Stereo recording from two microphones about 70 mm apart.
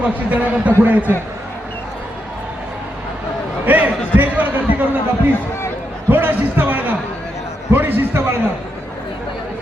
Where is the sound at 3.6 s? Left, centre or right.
Right.